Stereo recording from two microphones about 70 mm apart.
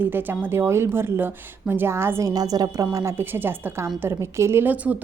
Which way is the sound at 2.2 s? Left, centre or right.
Right.